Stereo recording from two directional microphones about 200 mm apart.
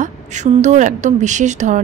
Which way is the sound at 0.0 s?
35° right (ahead or behind).